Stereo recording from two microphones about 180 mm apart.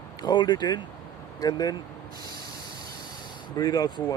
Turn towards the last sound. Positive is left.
turn(degrees=25)  # may be behind; listen again after turning